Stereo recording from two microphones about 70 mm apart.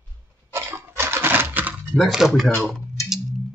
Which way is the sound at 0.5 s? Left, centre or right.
Right.